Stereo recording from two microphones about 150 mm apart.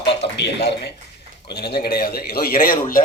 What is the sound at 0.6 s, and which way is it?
A man's voice, 90° left.